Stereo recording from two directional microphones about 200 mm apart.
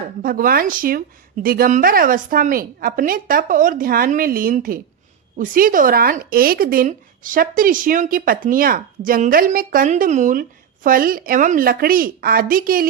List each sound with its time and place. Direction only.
0.2 s speech: 45° right (ahead or behind)